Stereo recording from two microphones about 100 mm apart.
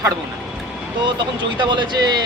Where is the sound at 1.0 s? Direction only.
50° right (ahead or behind).